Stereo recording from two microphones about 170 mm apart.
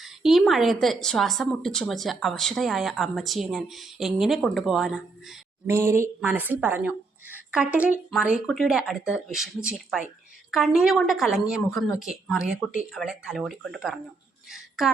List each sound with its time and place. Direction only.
0.0 s a woman's voice: centre (ahead or behind)
5.6 s a woman's voice: 15° right (ahead or behind); by 14.0 s centre (ahead or behind)
14.5 s a sound: centre (ahead or behind)